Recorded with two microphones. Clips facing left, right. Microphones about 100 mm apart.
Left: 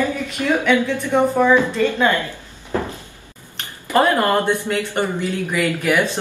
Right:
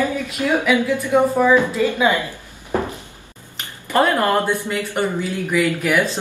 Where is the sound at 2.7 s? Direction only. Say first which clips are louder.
Right 1 dB; 20° right (ahead or behind).